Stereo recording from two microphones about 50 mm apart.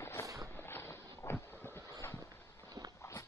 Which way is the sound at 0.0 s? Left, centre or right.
Left.